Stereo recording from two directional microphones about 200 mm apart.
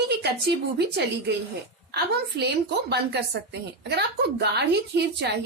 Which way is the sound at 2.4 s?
55° right (ahead or behind).